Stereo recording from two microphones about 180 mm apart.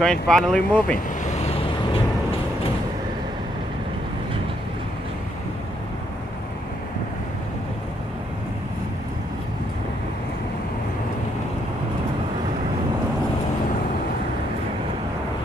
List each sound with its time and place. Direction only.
0.0 s speech: 5° left (ahead or behind)
1.3 s vehicle: 35° left (ahead or behind)